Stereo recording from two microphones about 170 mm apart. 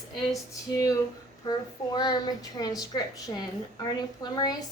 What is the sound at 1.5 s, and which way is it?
A woman's voice, 25° left (ahead or behind).